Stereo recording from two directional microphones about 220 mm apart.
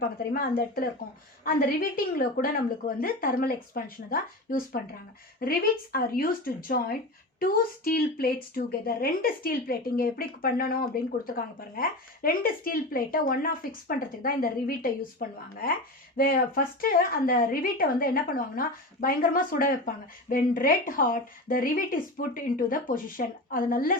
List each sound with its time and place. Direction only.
0.3 s speech: 40° left (ahead or behind)